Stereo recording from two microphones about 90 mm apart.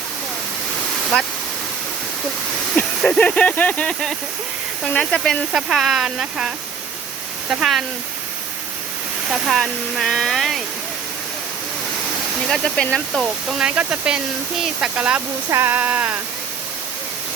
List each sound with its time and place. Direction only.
1.1 s speech: 10° left (ahead or behind)
3.0 s speech: 15° left (ahead or behind)
4.9 s speech: 5° left (ahead or behind)
5.5 s speech: 5° right (ahead or behind)
7.6 s speech: centre (ahead or behind)
9.3 s speech: centre (ahead or behind)
12.5 s speech: 10° left (ahead or behind)
13.1 s speech: centre (ahead or behind)
15.4 s speech: 30° right (ahead or behind)
15.7 s a sound: 20° right (ahead or behind)